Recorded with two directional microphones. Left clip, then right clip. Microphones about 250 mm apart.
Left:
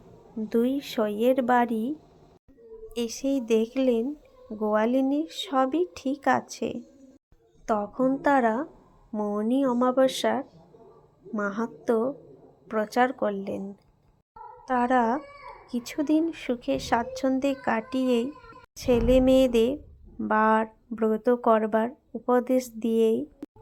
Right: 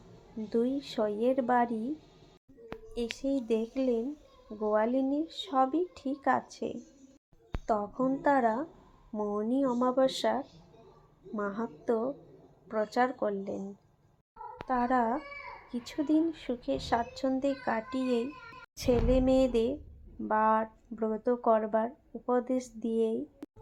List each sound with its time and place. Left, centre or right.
0.5 s a woman's voice: centre
3.2 s a woman's voice: centre
14.7 s a woman's voice: centre
23.4 s a sound: centre